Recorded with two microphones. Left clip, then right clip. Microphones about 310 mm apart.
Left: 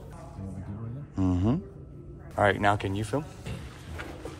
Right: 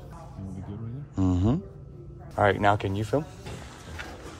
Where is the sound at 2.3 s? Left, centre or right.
Centre.